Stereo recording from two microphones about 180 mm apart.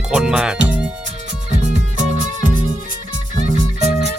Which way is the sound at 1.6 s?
40° right (ahead or behind).